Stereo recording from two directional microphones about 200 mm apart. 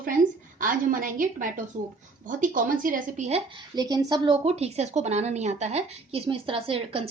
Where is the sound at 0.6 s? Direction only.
45° right (ahead or behind).